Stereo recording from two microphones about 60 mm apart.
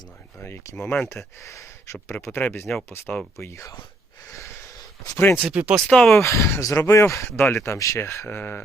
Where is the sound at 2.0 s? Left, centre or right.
Left.